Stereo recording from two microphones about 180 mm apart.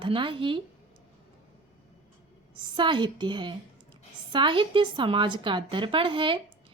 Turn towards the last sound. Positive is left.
turn(degrees=-30)  # may be behind; listen again after turning